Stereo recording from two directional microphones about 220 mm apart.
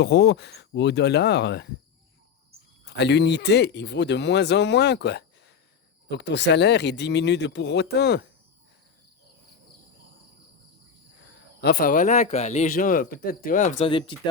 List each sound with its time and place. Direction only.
0.0 s speech: 50° left (ahead or behind)
2.8 s speech: 50° left (ahead or behind)
11.6 s speech: 45° left (ahead or behind); by 14.2 s 25° left (ahead or behind)